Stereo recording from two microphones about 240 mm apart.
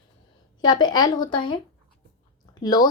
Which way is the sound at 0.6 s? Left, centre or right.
Centre.